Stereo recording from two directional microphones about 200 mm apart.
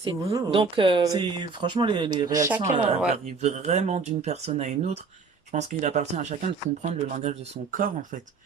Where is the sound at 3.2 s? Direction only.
35° right (ahead or behind).